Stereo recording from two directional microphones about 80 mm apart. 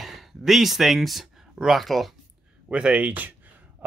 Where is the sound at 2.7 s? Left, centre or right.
Centre.